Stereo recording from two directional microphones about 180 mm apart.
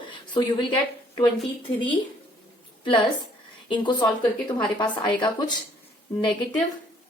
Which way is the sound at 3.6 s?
25° left (ahead or behind).